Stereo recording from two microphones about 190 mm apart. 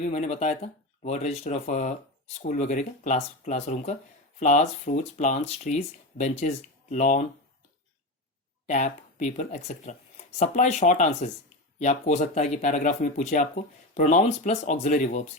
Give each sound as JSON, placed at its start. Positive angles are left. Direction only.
{"t": 0.0, "sound": "speech", "side_deg": 35}
{"t": 8.6, "sound": "speech", "side_deg": 40}